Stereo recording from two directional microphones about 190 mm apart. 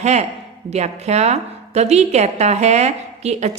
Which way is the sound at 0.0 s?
35° right (ahead or behind).